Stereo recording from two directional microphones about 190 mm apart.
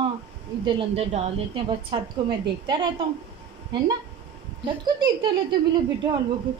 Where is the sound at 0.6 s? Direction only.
30° right (ahead or behind).